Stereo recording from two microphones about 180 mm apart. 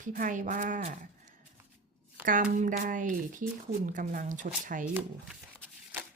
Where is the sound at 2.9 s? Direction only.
45° right (ahead or behind).